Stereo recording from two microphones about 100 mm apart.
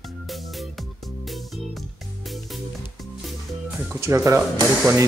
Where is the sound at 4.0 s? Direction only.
30° right (ahead or behind).